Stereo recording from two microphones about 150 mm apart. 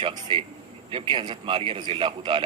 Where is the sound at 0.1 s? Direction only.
30° right (ahead or behind).